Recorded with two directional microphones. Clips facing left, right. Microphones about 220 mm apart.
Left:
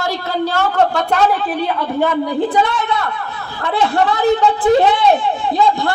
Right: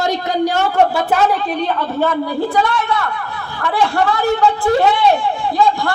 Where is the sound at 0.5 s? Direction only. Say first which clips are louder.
Right 1 dB; 15° right (ahead or behind).